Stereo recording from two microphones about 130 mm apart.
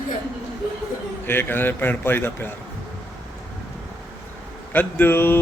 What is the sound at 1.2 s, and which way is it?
A man's voice, 15° left (ahead or behind).